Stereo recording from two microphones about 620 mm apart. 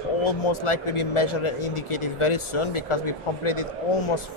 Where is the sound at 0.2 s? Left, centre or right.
Left.